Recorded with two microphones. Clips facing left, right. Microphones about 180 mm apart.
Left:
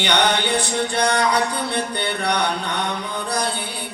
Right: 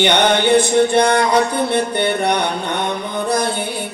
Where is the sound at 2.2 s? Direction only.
25° right (ahead or behind).